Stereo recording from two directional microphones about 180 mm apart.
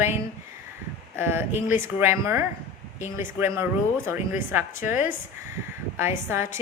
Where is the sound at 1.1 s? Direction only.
10° right (ahead or behind).